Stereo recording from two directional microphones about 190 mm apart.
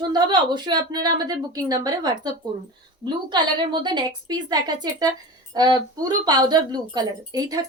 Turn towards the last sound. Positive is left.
turn(degrees=-20)  # may be behind; listen again after turning